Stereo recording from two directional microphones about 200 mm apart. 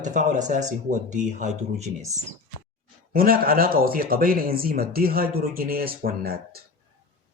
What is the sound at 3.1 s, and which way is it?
Speech, 45° right (ahead or behind).